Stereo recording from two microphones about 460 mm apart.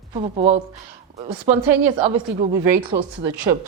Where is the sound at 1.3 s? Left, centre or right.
Right.